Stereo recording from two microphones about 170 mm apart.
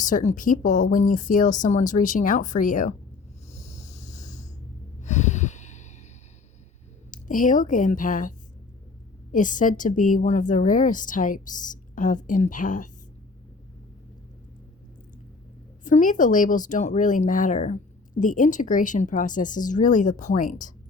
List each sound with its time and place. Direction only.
0.0 s a woman's voice: 45° left (ahead or behind)
3.5 s a sound: 40° left (ahead or behind)
7.1 s a woman's voice: 50° left (ahead or behind)
15.8 s a woman's voice: 50° left (ahead or behind)